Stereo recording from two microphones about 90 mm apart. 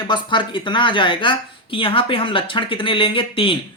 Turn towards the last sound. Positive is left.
turn(degrees=85)